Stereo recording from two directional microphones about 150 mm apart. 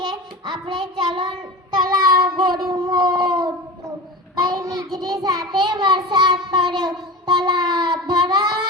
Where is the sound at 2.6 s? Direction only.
30° right (ahead or behind).